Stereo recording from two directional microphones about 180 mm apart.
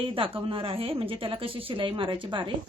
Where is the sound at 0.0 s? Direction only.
30° right (ahead or behind).